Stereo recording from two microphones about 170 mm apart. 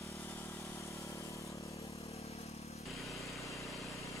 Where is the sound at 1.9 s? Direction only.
35° left (ahead or behind).